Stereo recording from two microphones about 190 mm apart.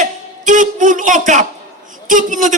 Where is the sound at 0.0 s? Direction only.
40° right (ahead or behind).